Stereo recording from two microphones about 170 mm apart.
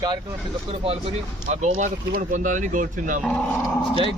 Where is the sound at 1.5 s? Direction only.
45° right (ahead or behind).